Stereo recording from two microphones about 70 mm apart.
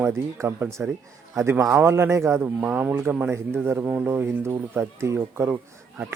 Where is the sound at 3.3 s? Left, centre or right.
Right.